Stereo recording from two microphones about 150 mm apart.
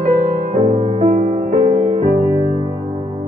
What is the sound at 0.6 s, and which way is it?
Music, 40° right (ahead or behind).